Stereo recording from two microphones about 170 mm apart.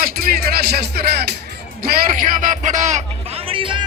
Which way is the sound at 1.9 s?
65° right (ahead or behind).